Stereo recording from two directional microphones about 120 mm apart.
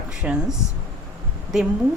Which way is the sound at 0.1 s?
10° right (ahead or behind).